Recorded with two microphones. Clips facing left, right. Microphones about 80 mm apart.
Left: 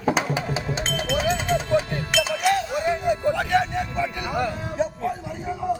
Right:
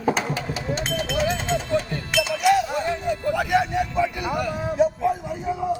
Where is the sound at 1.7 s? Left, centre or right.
Left.